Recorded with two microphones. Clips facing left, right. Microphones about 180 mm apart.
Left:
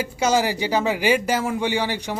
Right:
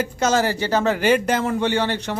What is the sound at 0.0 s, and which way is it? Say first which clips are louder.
Speech: right 1 dB; 10° left (ahead or behind).